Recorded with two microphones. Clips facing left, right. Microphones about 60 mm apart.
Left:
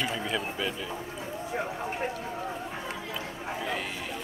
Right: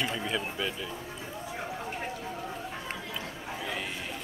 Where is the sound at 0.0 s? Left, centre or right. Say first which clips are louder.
Left 1 dB; centre.